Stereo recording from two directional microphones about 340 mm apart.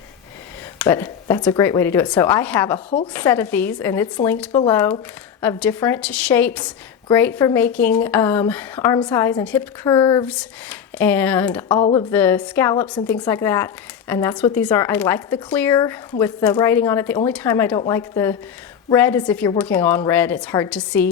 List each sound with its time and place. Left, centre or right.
0.8 s a woman's voice: centre
3.1 s a woman's voice: centre